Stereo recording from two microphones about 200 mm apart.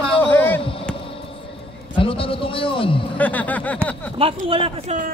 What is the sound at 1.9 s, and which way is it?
A man's voice, 25° left (ahead or behind).